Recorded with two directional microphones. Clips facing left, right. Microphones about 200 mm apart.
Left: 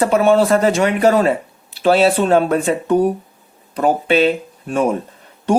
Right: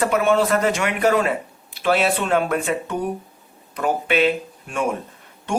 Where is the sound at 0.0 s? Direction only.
30° left (ahead or behind).